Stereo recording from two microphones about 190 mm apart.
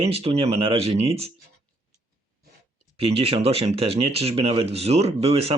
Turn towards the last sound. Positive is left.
turn(degrees=-30)  # may be behind; listen again after turning